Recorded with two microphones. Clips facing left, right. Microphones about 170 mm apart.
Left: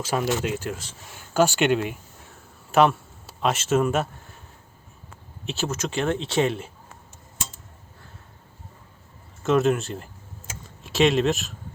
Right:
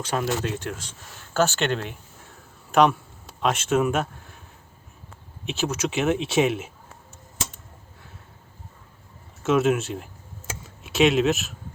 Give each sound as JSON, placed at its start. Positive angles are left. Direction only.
{"t": 0.0, "sound": "speech", "side_deg": 5}
{"t": 5.5, "sound": "speech", "side_deg": 0}
{"t": 9.4, "sound": "speech", "side_deg": 0}